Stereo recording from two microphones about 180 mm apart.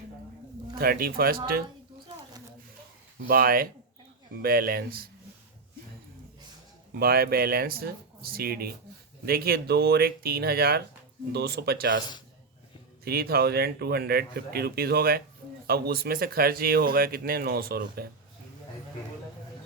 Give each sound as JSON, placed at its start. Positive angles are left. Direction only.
{"t": 0.8, "sound": "speech", "side_deg": -55}
{"t": 3.2, "sound": "speech", "side_deg": -55}
{"t": 6.9, "sound": "speech", "side_deg": -60}
{"t": 13.1, "sound": "speech", "side_deg": -60}